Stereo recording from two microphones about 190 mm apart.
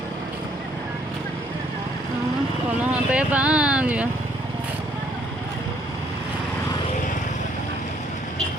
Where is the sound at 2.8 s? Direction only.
5° right (ahead or behind).